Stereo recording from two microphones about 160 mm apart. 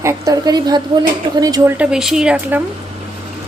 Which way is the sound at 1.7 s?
5° right (ahead or behind).